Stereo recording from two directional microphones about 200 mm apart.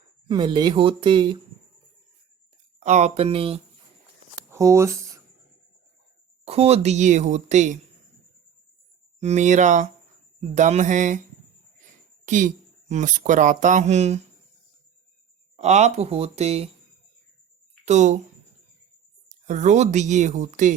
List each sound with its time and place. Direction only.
0.3 s speech: 20° right (ahead or behind)
2.8 s speech: 35° right (ahead or behind)
4.5 s speech: 15° right (ahead or behind)
6.4 s speech: 30° right (ahead or behind)
9.2 s speech: 35° right (ahead or behind)
11.8 s a sound: 40° right (ahead or behind)
12.9 s speech: 40° right (ahead or behind)
15.5 s speech: 35° right (ahead or behind)
17.8 s speech: 35° right (ahead or behind)
19.3 s speech: 40° right (ahead or behind)